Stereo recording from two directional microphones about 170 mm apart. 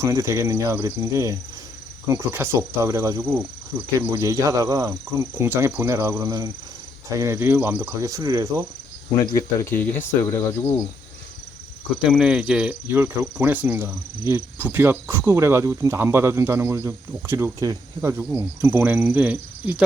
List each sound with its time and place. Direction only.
0.0 s speech: 15° right (ahead or behind)
9.1 s speech: 20° left (ahead or behind)
12.0 s speech: 5° right (ahead or behind)